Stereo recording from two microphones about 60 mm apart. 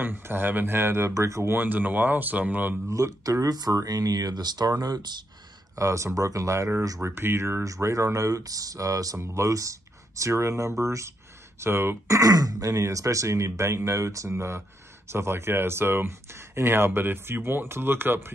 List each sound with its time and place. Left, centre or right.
0.0 s speech: right
1.1 s speech: right
1.6 s speech: right
2.9 s speech: right
5.8 s speech: right
7.0 s speech: right
7.6 s speech: right
9.2 s speech: right
11.6 s speech: right
12.1 s speech: right